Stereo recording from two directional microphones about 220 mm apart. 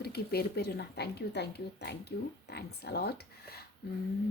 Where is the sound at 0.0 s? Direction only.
45° left (ahead or behind).